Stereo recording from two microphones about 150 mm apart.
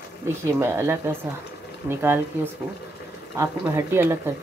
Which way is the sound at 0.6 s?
15° right (ahead or behind).